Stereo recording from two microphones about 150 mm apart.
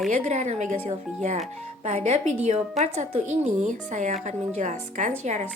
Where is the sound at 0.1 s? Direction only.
50° right (ahead or behind).